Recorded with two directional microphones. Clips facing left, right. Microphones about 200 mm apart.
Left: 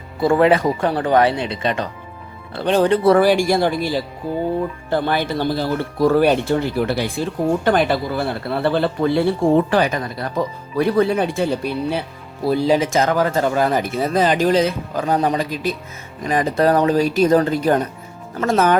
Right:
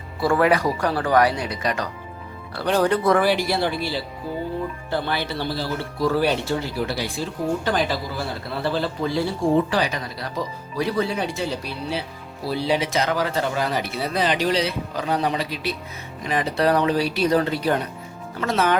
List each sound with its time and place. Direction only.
0.2 s speech: 25° left (ahead or behind); by 18.8 s 45° left (ahead or behind)